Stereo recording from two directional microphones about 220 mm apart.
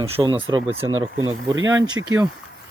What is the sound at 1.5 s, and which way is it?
Speech, 60° right (ahead or behind).